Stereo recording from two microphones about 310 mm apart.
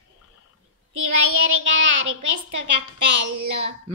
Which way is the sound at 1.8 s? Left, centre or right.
Right.